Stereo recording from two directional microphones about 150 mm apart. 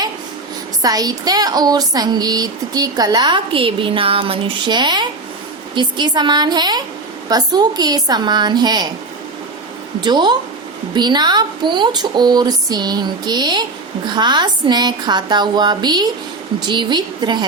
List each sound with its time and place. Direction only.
0.8 s speech: 25° right (ahead or behind)
10.0 s speech: 30° right (ahead or behind)